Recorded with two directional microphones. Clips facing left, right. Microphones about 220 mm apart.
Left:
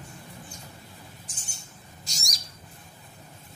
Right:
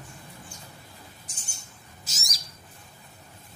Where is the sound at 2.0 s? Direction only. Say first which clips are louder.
Left 1 dB; 5° right (ahead or behind).